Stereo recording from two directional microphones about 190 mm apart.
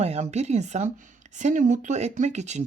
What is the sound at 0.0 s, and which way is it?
Speech, 35° right (ahead or behind).